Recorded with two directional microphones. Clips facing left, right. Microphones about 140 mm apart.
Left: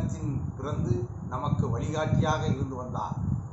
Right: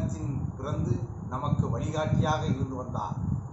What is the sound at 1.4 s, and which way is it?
A man's voice, 5° right (ahead or behind).